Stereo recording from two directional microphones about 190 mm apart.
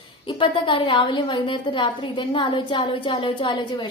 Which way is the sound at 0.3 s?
25° left (ahead or behind).